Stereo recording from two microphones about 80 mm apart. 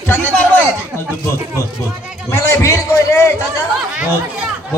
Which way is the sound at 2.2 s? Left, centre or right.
Left.